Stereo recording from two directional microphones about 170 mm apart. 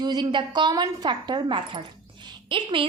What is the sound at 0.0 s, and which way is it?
A woman's voice, 25° right (ahead or behind).